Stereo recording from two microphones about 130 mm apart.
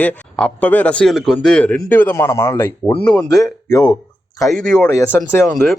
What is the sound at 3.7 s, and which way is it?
Speech, 30° left (ahead or behind).